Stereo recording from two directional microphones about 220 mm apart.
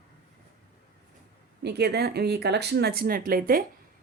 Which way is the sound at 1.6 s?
50° right (ahead or behind).